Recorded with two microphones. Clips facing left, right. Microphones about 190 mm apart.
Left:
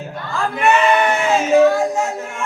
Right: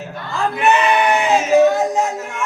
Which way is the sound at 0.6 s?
20° right (ahead or behind).